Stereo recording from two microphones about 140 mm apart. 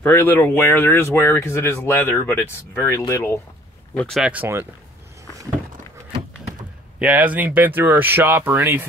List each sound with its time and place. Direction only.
0.0 s speech: 15° left (ahead or behind)
3.9 s speech: 10° left (ahead or behind)
4.2 s speech: 10° right (ahead or behind)
7.0 s speech: 10° right (ahead or behind)